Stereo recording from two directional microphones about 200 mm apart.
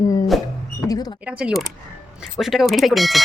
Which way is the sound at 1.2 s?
5° right (ahead or behind).